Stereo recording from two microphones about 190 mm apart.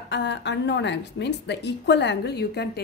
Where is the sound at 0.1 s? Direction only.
65° left (ahead or behind).